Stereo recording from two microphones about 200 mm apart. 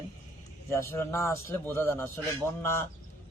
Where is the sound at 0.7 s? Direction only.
15° left (ahead or behind).